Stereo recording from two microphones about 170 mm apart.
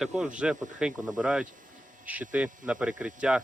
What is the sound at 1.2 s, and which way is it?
Speech, 5° right (ahead or behind).